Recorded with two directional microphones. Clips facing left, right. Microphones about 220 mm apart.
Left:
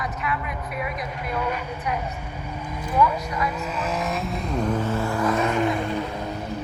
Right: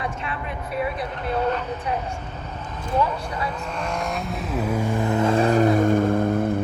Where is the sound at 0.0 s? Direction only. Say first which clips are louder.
Left 1 dB; 30° right (ahead or behind).